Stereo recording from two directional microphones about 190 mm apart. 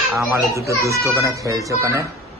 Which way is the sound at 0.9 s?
15° right (ahead or behind).